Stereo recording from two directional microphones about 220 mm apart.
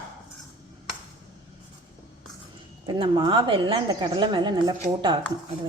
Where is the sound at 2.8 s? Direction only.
20° right (ahead or behind).